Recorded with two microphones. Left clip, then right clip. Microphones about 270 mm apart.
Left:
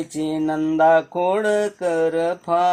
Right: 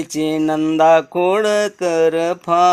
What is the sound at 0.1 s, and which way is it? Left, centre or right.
A man's voice, right.